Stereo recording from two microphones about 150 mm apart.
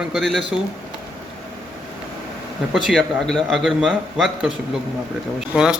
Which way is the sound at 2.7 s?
Centre (ahead or behind).